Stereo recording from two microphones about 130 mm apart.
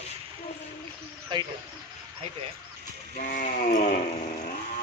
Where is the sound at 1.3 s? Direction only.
35° right (ahead or behind).